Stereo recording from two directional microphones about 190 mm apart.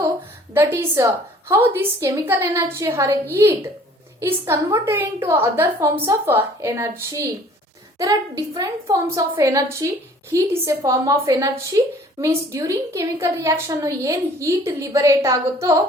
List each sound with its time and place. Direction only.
0.5 s a woman's voice: 10° right (ahead or behind)